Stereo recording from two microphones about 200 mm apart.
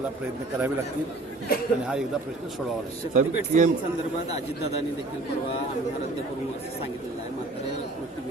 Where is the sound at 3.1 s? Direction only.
40° right (ahead or behind).